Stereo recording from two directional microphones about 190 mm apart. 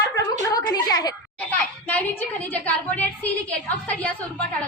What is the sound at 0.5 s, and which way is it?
Speech, 20° left (ahead or behind).